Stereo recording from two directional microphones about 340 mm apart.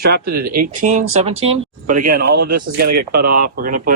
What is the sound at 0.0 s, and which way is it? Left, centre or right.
Speech, right.